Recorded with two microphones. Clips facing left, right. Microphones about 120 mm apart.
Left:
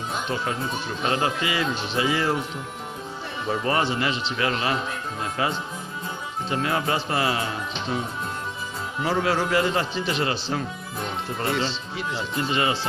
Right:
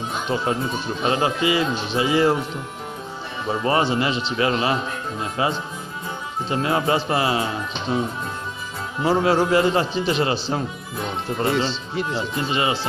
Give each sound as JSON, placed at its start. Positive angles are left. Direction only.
{"t": 0.3, "sound": "speech", "side_deg": -25}
{"t": 3.4, "sound": "speech", "side_deg": -25}
{"t": 9.0, "sound": "speech", "side_deg": -25}
{"t": 11.4, "sound": "speech", "side_deg": -25}
{"t": 11.9, "sound": "speech", "side_deg": -45}